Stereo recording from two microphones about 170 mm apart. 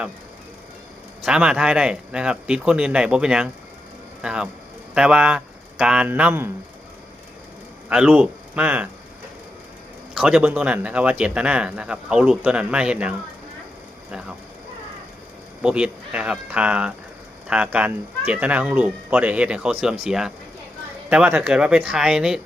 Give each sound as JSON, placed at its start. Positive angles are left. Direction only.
{"t": 1.2, "sound": "speech", "side_deg": -5}
{"t": 7.9, "sound": "speech", "side_deg": -5}
{"t": 10.2, "sound": "speech", "side_deg": -5}
{"t": 15.6, "sound": "speech", "side_deg": -5}